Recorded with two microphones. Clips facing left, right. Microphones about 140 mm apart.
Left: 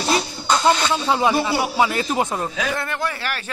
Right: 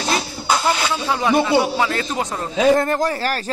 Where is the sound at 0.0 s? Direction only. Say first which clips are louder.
Left 1 dB; centre (ahead or behind).